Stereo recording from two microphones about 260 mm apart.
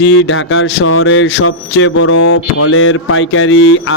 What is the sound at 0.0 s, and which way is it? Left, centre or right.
Speech, left.